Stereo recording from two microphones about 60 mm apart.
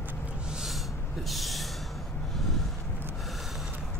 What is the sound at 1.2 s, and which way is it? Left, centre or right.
Gasp, centre.